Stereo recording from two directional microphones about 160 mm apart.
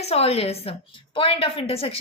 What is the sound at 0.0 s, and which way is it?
A woman's voice, 40° left (ahead or behind).